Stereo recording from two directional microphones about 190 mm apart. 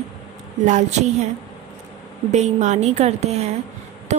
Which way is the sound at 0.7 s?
40° right (ahead or behind).